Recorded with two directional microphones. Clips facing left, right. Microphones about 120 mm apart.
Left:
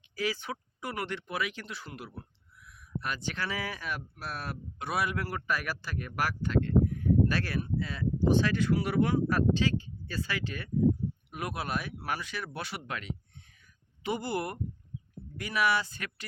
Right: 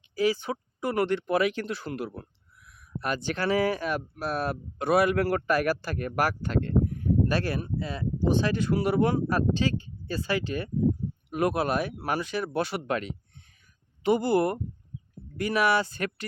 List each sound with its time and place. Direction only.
0.2 s speech: 30° right (ahead or behind); by 2.0 s 60° right (ahead or behind)
3.3 s speech: 50° right (ahead or behind)
4.9 s a man's voice: 60° right (ahead or behind)
7.3 s speech: 25° right (ahead or behind)
8.7 s speech: 35° right (ahead or behind)
11.3 s speech: 50° right (ahead or behind)
14.3 s speech: 35° right (ahead or behind)
15.4 s speech: 45° right (ahead or behind)